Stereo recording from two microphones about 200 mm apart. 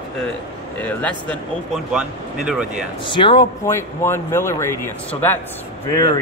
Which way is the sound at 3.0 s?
25° left (ahead or behind).